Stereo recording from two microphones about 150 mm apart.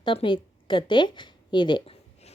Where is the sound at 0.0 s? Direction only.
35° left (ahead or behind).